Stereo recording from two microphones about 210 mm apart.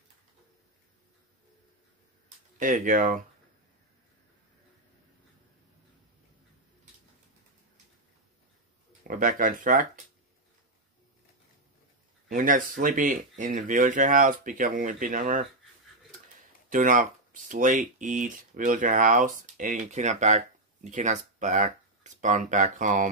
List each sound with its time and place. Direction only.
2.6 s speech: 40° right (ahead or behind)
9.0 s speech: 40° right (ahead or behind)
12.4 s speech: 40° right (ahead or behind)
16.6 s speech: 40° right (ahead or behind)